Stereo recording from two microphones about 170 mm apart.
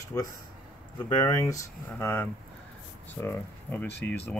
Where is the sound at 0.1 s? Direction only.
20° left (ahead or behind).